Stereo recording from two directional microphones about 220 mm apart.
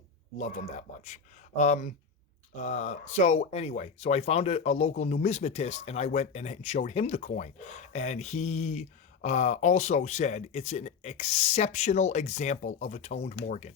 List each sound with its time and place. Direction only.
0.3 s speech: 30° left (ahead or behind)